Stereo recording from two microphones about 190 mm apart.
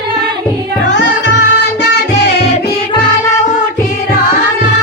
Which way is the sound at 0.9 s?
70° left (ahead or behind).